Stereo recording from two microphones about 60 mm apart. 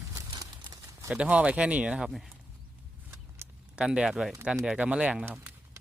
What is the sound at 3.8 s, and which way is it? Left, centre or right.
Speech, centre.